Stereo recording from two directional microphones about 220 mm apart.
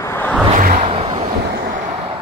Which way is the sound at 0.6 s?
35° right (ahead or behind).